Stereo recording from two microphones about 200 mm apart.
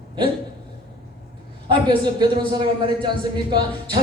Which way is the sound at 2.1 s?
20° right (ahead or behind).